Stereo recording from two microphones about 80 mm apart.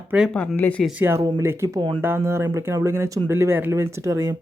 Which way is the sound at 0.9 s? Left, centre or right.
Right.